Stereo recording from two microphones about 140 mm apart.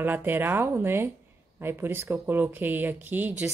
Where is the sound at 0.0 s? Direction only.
15° right (ahead or behind).